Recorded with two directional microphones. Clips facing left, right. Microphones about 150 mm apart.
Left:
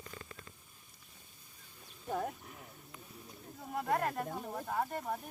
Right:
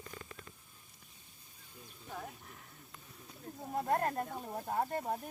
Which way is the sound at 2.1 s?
50° left (ahead or behind).